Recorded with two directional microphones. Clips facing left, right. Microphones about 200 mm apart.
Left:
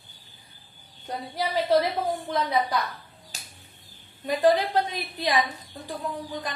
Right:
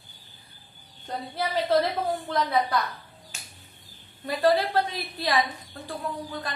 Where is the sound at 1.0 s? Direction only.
15° left (ahead or behind).